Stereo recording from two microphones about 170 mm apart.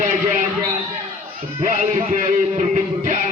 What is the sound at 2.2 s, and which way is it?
A man's voice, 45° right (ahead or behind).